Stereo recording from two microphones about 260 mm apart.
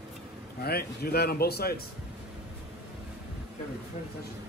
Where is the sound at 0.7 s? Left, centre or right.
Left.